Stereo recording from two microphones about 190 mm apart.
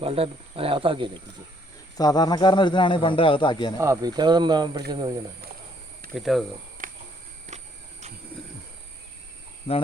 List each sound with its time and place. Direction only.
0.0 s speech: 30° right (ahead or behind)
2.0 s speech: 20° left (ahead or behind)
3.8 s speech: 20° right (ahead or behind)
6.1 s speech: centre (ahead or behind)
6.8 s a sound: 45° right (ahead or behind)
9.7 s speech: 30° left (ahead or behind)